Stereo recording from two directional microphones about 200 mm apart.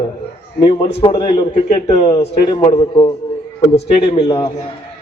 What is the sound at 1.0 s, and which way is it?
A man's voice, 25° left (ahead or behind).